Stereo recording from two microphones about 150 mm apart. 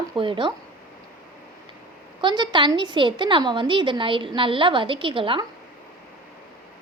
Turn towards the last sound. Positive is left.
turn(degrees=-35)  # may be behind; listen again after turning